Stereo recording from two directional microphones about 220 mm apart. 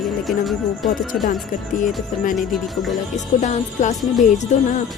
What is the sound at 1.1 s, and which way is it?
Music, 40° left (ahead or behind).